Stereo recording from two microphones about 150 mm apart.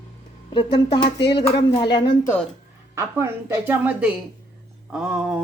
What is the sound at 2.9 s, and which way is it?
Speech, 20° right (ahead or behind).